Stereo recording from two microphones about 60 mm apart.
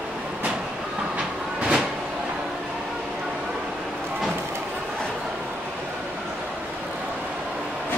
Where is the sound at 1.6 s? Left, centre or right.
Centre.